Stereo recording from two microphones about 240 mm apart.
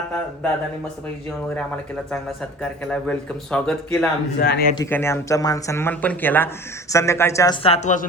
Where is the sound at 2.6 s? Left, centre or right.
Centre.